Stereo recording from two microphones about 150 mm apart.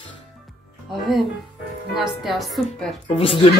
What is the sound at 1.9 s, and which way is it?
A woman's voice, centre (ahead or behind).